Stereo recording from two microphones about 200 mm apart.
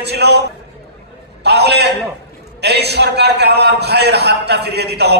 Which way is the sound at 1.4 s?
55° right (ahead or behind).